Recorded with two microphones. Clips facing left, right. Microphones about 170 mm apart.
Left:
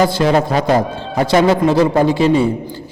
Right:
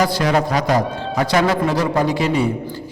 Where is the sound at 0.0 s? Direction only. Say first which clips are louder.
Left 4 dB; 25° left (ahead or behind).